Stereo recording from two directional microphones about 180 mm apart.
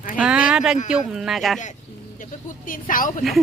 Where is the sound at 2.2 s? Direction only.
45° left (ahead or behind).